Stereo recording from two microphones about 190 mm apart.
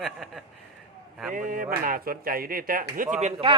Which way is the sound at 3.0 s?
40° right (ahead or behind).